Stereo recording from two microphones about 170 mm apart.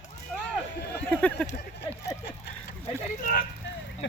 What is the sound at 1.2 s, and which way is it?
Speech, 5° left (ahead or behind).